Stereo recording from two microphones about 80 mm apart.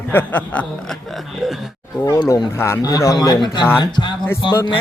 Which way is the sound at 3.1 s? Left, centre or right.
Left.